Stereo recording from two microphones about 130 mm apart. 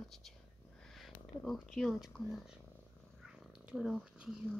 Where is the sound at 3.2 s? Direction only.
5° right (ahead or behind).